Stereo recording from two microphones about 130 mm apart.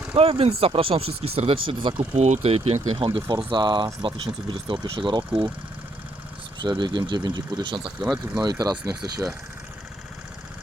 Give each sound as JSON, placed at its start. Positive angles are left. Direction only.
{"t": 0.1, "sound": "speech", "side_deg": -50}
{"t": 2.1, "sound": "speech", "side_deg": -65}
{"t": 6.6, "sound": "speech", "side_deg": -35}